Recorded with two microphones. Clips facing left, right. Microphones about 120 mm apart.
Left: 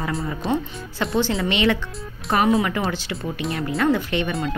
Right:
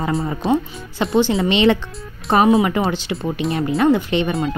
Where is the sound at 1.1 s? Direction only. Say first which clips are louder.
Right 6 dB; 25° right (ahead or behind).